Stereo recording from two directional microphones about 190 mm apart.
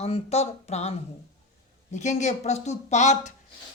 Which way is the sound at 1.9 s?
40° left (ahead or behind).